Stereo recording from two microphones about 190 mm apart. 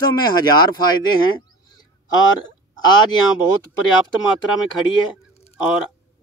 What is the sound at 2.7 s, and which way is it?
Speech, 25° left (ahead or behind).